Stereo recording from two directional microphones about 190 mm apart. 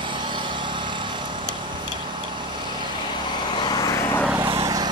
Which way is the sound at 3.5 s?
25° left (ahead or behind).